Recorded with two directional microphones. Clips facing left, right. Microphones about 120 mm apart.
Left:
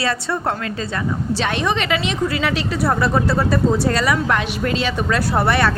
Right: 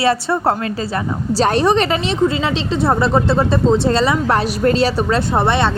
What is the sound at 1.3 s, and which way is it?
Speech, 35° right (ahead or behind).